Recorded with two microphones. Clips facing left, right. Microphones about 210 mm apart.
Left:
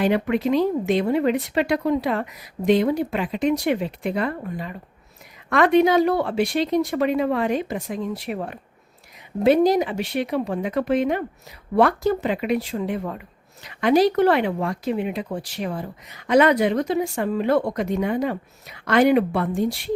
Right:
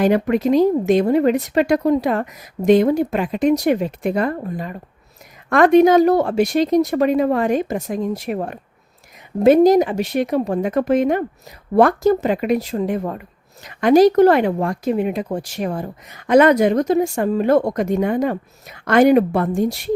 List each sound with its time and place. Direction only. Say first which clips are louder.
0.0 s speech: right 4 dB; 40° right (ahead or behind)